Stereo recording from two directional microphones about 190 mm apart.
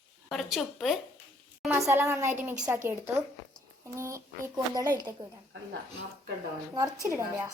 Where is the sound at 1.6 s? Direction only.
15° right (ahead or behind).